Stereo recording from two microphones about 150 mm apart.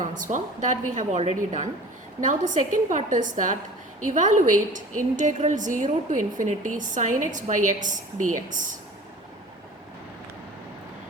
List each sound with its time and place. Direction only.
0.2 s a woman's voice: 55° right (ahead or behind)
2.2 s a woman's voice: 55° right (ahead or behind)